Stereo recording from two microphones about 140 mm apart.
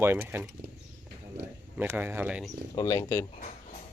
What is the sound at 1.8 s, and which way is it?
Speech, 10° right (ahead or behind).